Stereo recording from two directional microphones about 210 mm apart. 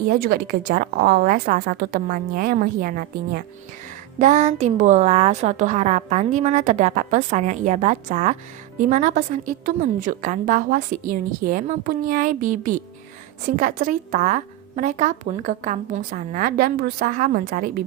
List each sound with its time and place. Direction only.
0.1 s a woman's voice: 45° right (ahead or behind)